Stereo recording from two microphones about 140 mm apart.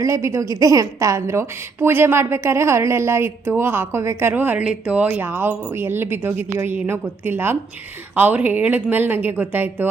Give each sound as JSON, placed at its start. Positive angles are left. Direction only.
{"t": 0.0, "sound": "a woman's voice", "side_deg": -20}